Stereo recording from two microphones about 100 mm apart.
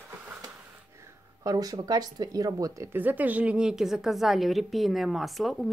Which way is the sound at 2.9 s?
20° right (ahead or behind).